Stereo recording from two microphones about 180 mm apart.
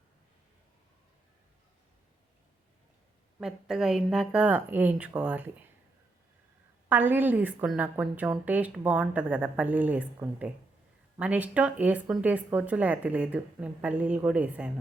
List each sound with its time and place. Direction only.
3.4 s a woman's voice: 5° right (ahead or behind)
6.8 s a woman's voice: 10° right (ahead or behind)